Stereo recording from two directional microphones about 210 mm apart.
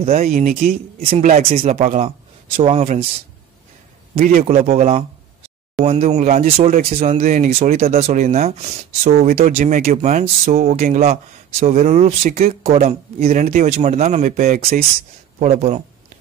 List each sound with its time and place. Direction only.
0.0 s a man's voice: 30° right (ahead or behind)
4.1 s speech: 45° right (ahead or behind)